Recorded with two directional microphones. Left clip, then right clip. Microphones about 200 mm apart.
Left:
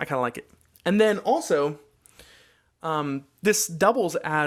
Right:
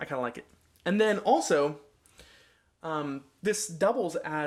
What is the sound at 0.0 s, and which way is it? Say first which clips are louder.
Speech: left 6 dB; 40° left (ahead or behind).